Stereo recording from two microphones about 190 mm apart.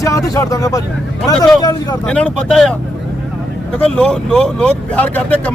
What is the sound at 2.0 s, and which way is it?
Speech, 5° left (ahead or behind).